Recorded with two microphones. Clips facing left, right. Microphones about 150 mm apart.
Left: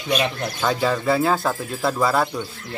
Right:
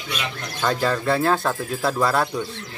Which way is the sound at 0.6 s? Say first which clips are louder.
Left 1 dB; 5° left (ahead or behind).